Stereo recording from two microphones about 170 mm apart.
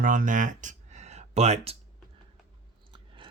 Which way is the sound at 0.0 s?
50° right (ahead or behind).